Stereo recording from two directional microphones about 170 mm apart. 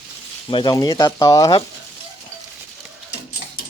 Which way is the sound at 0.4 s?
25° left (ahead or behind).